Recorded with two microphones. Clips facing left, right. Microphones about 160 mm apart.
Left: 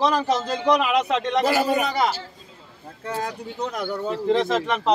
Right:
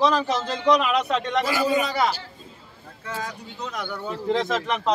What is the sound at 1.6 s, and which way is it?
Speech, 60° left (ahead or behind).